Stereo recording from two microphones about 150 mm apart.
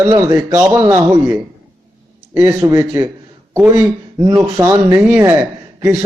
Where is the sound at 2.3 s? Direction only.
20° right (ahead or behind).